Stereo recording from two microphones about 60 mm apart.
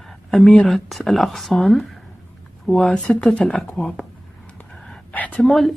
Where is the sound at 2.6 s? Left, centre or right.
Centre.